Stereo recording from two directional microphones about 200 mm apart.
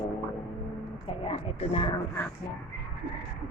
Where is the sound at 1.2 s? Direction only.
30° left (ahead or behind).